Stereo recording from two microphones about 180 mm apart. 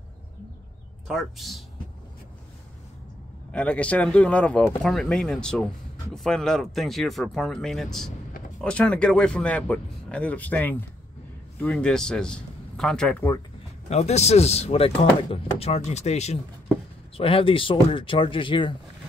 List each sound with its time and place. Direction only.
1.0 s speech: centre (ahead or behind)
3.5 s speech: 5° left (ahead or behind)
13.8 s speech: 35° left (ahead or behind)